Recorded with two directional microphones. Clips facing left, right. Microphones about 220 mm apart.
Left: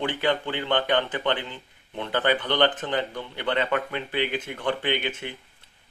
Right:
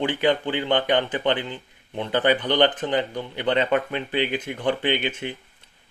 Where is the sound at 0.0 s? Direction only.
15° right (ahead or behind).